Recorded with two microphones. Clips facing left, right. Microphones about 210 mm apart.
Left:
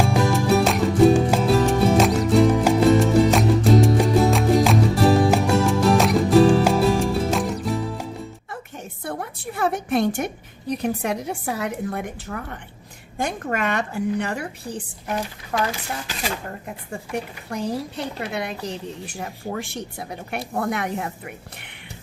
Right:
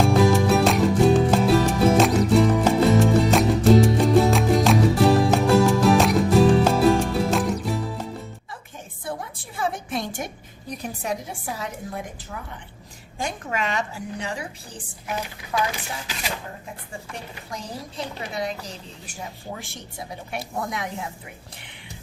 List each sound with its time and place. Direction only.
0.2 s music: centre (ahead or behind)
9.0 s a sound: 60° left (ahead or behind)
10.8 s a woman's voice: 65° left (ahead or behind)
15.5 s speech: 50° left (ahead or behind)
17.5 s a woman's voice: 65° left (ahead or behind)